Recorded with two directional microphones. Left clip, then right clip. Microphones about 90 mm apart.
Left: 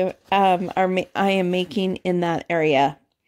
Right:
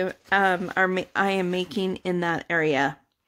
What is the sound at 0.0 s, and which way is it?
Speech, 50° left (ahead or behind).